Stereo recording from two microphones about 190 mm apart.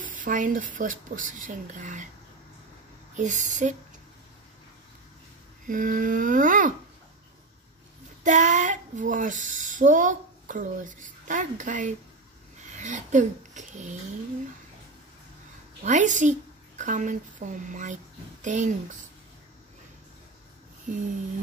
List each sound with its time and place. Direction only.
0.0 s speech: 45° right (ahead or behind)
3.2 s speech: 40° right (ahead or behind)
5.7 s speech: 45° right (ahead or behind)
8.2 s speech: 40° right (ahead or behind)
15.8 s a woman's voice: 40° right (ahead or behind)